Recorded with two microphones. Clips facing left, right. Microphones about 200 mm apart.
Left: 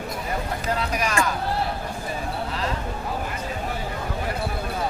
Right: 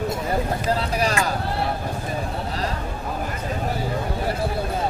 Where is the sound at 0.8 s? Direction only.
35° right (ahead or behind).